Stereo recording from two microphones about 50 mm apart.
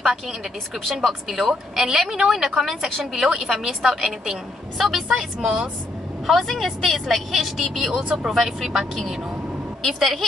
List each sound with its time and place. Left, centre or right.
1.0 s a woman's voice: centre
6.2 s a woman's voice: centre
8.0 s speech: right
8.3 s a woman's voice: centre